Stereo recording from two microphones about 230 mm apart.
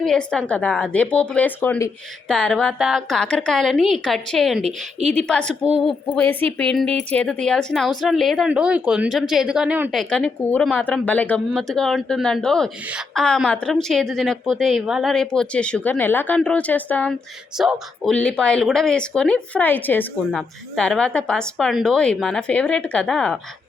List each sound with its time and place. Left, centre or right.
0.0 s speech: centre
4.6 s a woman's voice: right
5.1 s speech: centre